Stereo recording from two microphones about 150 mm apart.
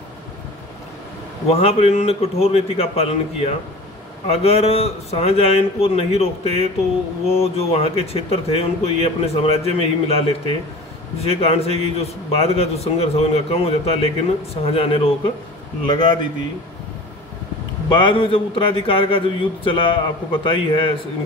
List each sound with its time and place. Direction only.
1.5 s a man's voice: 45° left (ahead or behind)
17.9 s a man's voice: 35° left (ahead or behind)